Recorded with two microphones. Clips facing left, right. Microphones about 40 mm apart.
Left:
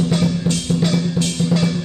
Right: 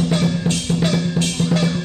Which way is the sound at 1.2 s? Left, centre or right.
Right.